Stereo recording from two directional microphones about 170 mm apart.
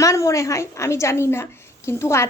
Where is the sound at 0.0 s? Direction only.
20° left (ahead or behind).